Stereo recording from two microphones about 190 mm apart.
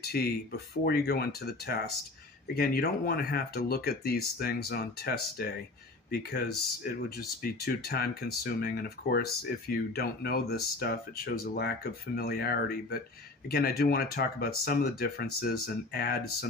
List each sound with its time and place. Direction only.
0.0 s speech: 55° left (ahead or behind)